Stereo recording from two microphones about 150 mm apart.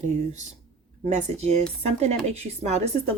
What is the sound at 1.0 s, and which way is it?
Speech, 50° right (ahead or behind).